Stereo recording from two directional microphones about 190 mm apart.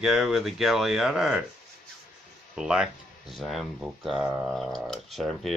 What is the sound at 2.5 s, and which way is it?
Speech, 5° right (ahead or behind).